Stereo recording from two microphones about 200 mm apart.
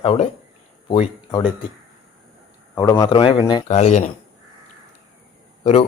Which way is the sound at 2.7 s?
15° left (ahead or behind).